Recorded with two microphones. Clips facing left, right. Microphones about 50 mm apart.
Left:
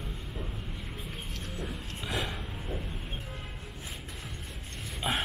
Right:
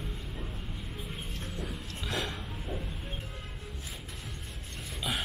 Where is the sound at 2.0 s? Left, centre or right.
Centre.